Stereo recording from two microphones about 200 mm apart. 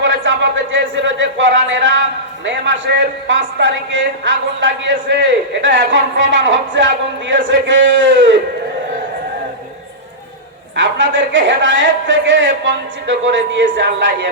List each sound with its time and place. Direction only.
0.0 s a sound: 70° right (ahead or behind)
3.2 s a man's voice: 70° right (ahead or behind)
10.8 s a man's voice: 65° right (ahead or behind)